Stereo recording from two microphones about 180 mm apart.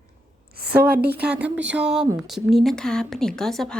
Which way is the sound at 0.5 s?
60° right (ahead or behind).